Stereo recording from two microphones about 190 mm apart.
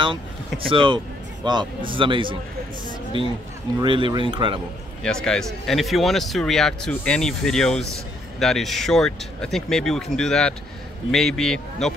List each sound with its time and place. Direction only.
0.0 s speech: 25° right (ahead or behind)
3.8 s speech: 25° right (ahead or behind)
5.0 s speech: 5° left (ahead or behind)